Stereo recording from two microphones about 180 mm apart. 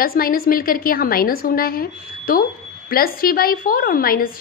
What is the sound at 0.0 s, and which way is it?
A woman's voice, 55° left (ahead or behind).